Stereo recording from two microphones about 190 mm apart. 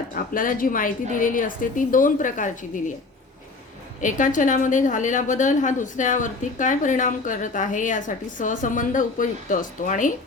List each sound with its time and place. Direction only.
0.3 s a woman's voice: 45° left (ahead or behind)
4.0 s a woman's voice: 45° left (ahead or behind)